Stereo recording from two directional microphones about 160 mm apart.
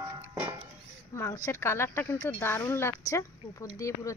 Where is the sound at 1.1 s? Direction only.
20° left (ahead or behind).